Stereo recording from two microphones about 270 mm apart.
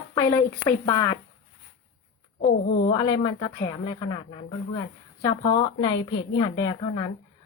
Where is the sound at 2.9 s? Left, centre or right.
Centre.